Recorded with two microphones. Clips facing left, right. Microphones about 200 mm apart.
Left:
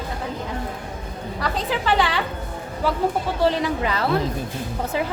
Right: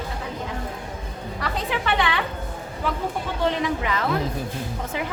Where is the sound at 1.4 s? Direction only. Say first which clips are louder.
Left 2 dB; 35° left (ahead or behind).